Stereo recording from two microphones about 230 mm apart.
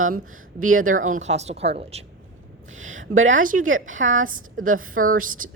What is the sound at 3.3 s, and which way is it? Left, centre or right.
A woman's voice, right.